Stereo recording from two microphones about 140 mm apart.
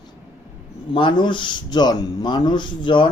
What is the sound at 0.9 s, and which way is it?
Speech, 35° left (ahead or behind).